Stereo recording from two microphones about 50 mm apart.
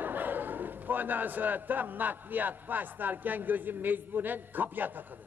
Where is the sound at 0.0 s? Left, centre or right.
Right.